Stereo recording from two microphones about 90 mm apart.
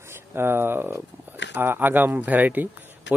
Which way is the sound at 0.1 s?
25° right (ahead or behind).